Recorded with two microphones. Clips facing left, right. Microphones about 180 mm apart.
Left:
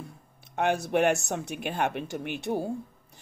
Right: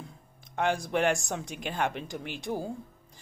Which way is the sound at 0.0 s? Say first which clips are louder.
Left 3 dB; 65° left (ahead or behind).